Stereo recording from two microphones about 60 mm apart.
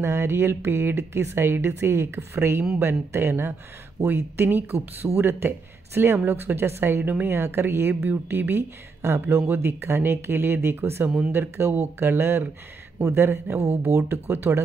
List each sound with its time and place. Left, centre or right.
0.0 s a woman's voice: right
11.1 s a woman's voice: right